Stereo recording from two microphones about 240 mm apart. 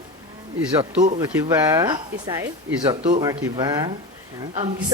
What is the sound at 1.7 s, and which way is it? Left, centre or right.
A woman's voice, centre.